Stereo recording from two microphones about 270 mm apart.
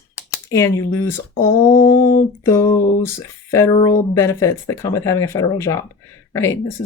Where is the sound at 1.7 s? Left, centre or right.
Left.